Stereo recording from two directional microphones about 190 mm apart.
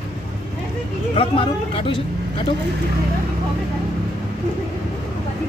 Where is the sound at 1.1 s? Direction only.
30° left (ahead or behind).